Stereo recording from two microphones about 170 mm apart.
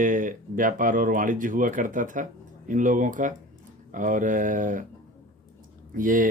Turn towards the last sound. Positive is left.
turn(degrees=-50)  # may be behind; listen again after turning